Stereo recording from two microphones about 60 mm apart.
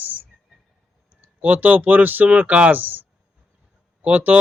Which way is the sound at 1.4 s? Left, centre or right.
Right.